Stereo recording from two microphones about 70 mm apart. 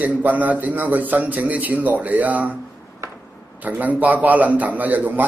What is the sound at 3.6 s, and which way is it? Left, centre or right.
A man's voice, right.